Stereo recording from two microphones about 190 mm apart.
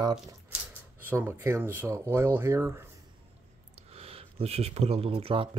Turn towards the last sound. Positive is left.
turn(degrees=-30)  # may be behind; listen again after turning